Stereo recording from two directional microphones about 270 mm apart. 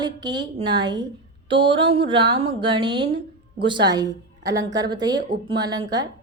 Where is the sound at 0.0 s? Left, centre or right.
Centre.